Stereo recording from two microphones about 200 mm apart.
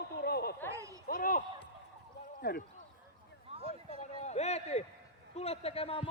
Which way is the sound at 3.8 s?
35° left (ahead or behind).